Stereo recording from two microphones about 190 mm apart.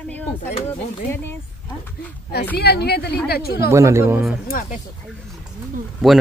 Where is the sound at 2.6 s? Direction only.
55° left (ahead or behind).